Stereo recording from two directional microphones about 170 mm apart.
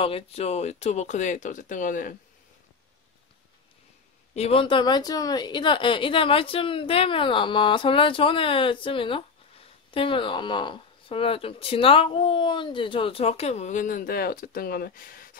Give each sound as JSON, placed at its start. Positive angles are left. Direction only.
{"t": 0.0, "sound": "speech", "side_deg": 35}
{"t": 4.3, "sound": "speech", "side_deg": 35}